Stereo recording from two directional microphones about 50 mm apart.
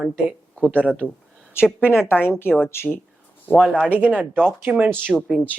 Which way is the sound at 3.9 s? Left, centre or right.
Right.